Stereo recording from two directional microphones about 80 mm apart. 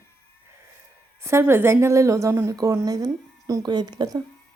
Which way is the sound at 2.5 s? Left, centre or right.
Right.